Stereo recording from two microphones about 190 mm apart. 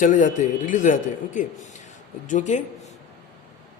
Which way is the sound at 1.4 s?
40° left (ahead or behind).